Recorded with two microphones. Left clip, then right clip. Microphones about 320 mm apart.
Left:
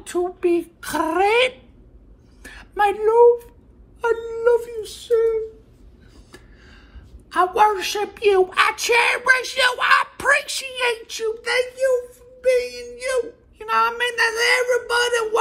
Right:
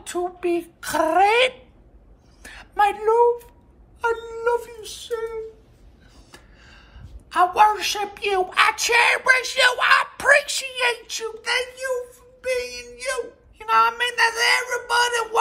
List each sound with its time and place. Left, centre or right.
0.0 s a child's voice: centre
6.3 s a sound: centre
7.2 s a child's voice: centre